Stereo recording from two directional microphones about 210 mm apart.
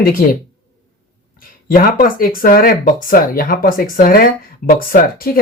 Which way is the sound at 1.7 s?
45° left (ahead or behind).